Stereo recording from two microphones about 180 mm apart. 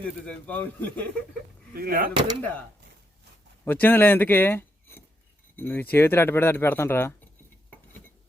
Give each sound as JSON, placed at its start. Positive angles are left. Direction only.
{"t": 0.3, "sound": "speech", "side_deg": 10}
{"t": 1.7, "sound": "speech", "side_deg": -55}
{"t": 2.4, "sound": "speech", "side_deg": 10}